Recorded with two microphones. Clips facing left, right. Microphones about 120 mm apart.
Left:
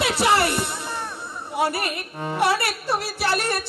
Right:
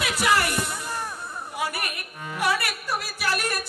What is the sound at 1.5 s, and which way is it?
A man's voice, 30° left (ahead or behind).